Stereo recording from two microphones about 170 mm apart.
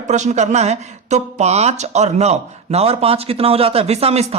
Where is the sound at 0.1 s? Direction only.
45° right (ahead or behind).